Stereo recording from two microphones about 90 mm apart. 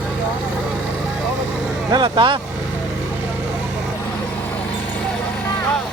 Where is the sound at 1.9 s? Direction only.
60° right (ahead or behind).